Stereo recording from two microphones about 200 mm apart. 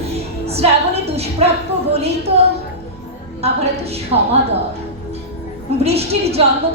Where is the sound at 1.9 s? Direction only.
30° right (ahead or behind).